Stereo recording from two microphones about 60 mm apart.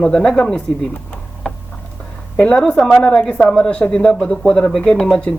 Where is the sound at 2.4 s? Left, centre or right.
Centre.